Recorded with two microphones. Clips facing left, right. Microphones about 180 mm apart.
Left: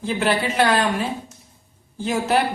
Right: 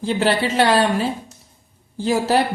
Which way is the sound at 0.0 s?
30° right (ahead or behind).